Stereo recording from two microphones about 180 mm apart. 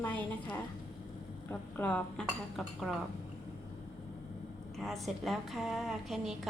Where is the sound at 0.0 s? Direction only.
10° left (ahead or behind).